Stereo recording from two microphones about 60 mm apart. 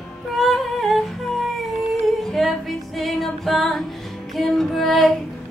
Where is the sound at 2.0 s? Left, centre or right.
Centre.